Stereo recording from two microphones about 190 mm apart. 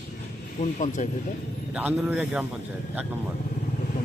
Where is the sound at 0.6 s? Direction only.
40° left (ahead or behind).